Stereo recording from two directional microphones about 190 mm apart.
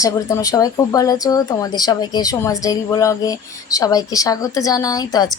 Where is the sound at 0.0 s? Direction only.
15° left (ahead or behind).